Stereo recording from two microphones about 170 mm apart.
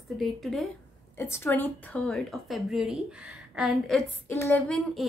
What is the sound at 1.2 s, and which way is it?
Speech, 15° left (ahead or behind).